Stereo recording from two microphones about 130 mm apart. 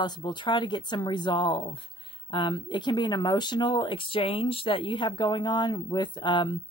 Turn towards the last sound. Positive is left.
turn(degrees=35)  # may be behind; listen again after turning